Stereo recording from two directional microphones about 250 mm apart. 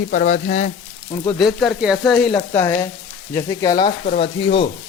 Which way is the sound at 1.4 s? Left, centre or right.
Centre.